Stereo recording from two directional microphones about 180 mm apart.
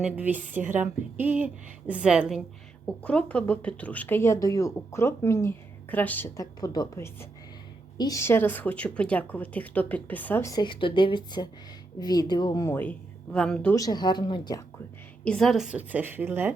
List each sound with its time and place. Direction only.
0.0 s a woman's voice: 10° right (ahead or behind)
13.7 s speech: 20° left (ahead or behind)
15.2 s a woman's voice: 5° left (ahead or behind); by 16.5 s 10° right (ahead or behind)